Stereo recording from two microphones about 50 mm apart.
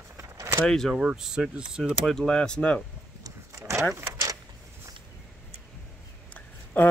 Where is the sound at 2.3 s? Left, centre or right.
Centre.